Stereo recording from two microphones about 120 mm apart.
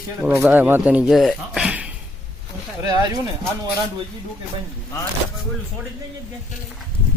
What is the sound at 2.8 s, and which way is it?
Speech, 30° right (ahead or behind).